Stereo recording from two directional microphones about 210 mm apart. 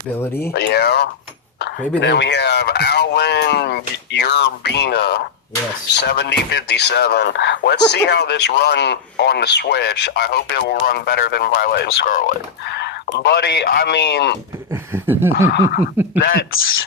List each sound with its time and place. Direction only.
0.2 s speech: 10° left (ahead or behind)
0.5 s speech: 50° left (ahead or behind)
14.7 s speech: 10° right (ahead or behind)
15.3 s speech: 45° left (ahead or behind)
16.1 s speech: 55° left (ahead or behind)